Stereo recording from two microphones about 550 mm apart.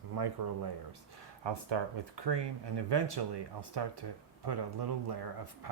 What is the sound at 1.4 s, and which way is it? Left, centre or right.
Speech, right.